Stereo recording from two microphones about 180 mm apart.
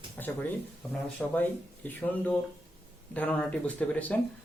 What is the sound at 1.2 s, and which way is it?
Speech, 5° left (ahead or behind).